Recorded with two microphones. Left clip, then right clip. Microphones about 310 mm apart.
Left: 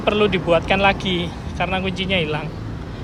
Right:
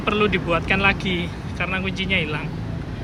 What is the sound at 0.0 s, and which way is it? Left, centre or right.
Speech, centre.